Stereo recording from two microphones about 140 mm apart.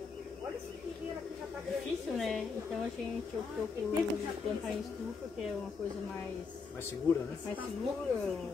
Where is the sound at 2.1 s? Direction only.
Centre (ahead or behind).